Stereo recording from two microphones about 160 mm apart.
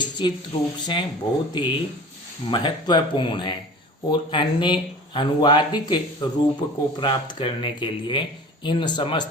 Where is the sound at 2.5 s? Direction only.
25° left (ahead or behind).